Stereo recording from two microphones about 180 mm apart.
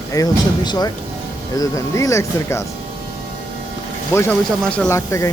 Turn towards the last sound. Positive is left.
turn(degrees=15)  # may be behind; listen again after turning